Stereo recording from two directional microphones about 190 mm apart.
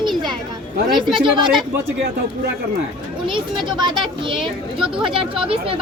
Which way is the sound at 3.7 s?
25° right (ahead or behind).